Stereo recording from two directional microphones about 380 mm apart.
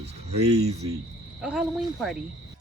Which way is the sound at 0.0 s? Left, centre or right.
Centre.